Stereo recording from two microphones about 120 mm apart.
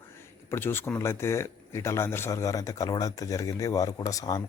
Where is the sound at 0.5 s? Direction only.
20° left (ahead or behind).